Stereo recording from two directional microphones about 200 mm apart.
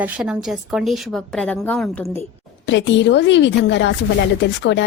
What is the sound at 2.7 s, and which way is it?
A woman's voice, 65° left (ahead or behind).